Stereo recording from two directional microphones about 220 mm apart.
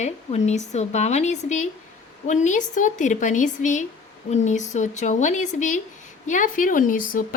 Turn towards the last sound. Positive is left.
turn(degrees=40)  # may be behind; listen again after turning